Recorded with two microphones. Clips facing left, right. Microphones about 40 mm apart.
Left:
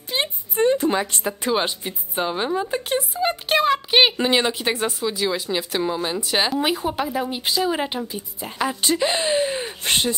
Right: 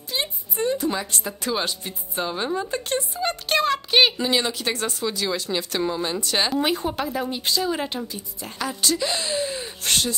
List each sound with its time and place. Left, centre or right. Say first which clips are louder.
0.1 s a woman's voice: left 3 dB; left
4.2 s speech: left 3 dB; left
6.5 s speech: left 1 dB; centre; by 10.1 s left